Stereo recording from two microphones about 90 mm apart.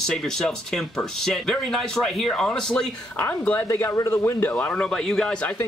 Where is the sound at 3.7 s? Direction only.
35° left (ahead or behind).